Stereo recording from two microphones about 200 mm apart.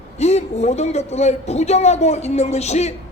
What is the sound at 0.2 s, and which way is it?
Speech, 35° left (ahead or behind).